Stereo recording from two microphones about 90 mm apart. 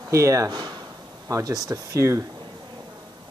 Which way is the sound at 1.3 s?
45° right (ahead or behind).